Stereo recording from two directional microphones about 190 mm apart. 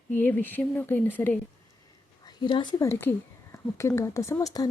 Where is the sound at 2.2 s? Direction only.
25° left (ahead or behind).